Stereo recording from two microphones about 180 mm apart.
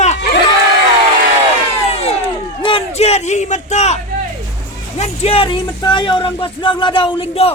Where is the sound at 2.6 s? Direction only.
35° left (ahead or behind).